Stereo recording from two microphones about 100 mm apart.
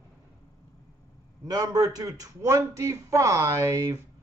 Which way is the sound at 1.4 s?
35° right (ahead or behind).